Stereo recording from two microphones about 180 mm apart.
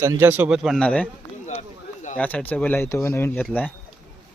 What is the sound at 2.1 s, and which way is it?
Speech, 10° left (ahead or behind).